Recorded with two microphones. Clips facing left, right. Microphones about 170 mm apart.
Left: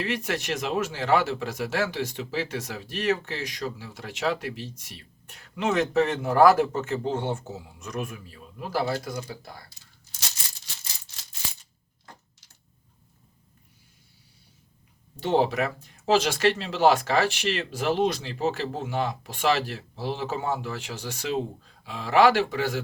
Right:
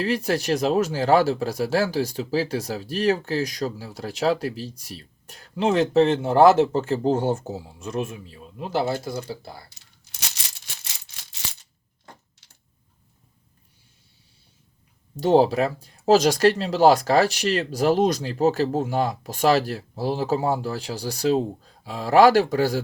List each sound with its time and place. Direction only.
0.0 s speech: 35° right (ahead or behind)
10.0 s rattle: 75° right (ahead or behind)
10.8 s a sound: 75° right (ahead or behind)
15.1 s speech: 40° right (ahead or behind)